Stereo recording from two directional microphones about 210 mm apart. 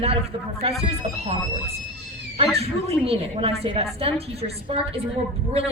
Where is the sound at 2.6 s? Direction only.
30° right (ahead or behind).